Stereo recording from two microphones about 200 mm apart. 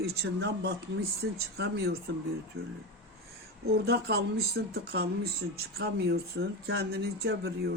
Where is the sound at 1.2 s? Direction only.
60° right (ahead or behind).